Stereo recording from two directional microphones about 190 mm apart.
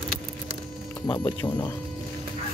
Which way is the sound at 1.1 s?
25° left (ahead or behind).